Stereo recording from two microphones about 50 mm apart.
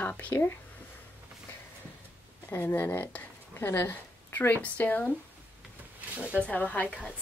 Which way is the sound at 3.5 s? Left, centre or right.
Left.